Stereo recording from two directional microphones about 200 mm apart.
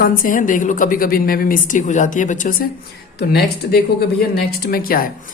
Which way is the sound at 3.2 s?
55° left (ahead or behind).